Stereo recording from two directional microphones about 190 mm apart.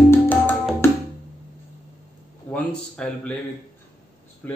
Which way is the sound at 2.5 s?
5° left (ahead or behind).